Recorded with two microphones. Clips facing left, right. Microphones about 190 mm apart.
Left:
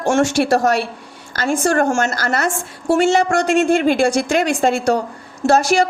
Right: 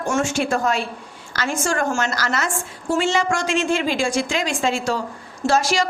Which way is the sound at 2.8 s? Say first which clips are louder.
Left 6 dB; 60° left (ahead or behind).